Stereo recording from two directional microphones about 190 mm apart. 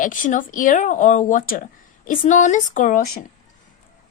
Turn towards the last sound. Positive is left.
turn(degrees=40)  # may be behind; listen again after turning